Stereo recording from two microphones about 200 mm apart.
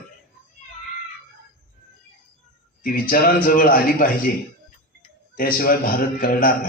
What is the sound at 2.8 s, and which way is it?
A man's voice, 45° left (ahead or behind).